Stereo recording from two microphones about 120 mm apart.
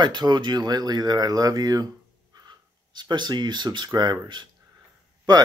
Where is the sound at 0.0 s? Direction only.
40° right (ahead or behind).